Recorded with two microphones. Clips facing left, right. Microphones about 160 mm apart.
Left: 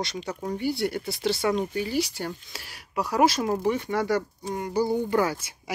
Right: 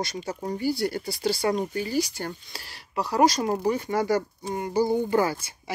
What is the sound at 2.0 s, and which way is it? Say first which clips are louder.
Speech: even; centre (ahead or behind).